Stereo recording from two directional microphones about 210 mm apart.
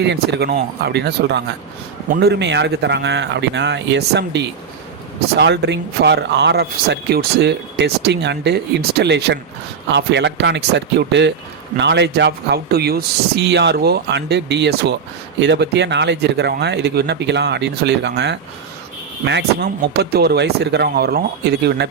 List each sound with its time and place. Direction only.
0.0 s speech: 55° right (ahead or behind)